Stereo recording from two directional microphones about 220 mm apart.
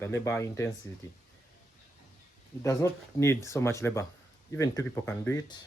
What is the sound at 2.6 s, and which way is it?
Speech, 15° left (ahead or behind).